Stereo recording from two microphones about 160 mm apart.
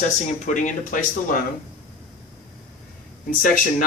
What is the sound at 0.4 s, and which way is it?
Speech, 55° left (ahead or behind).